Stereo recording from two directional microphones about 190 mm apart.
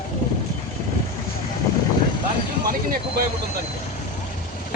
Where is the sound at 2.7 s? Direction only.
50° right (ahead or behind).